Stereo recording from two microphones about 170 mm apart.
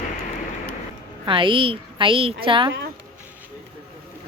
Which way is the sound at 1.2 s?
30° right (ahead or behind).